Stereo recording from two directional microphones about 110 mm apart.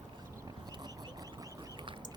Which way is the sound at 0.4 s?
40° right (ahead or behind).